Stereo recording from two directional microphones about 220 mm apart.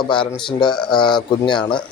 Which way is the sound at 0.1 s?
20° left (ahead or behind).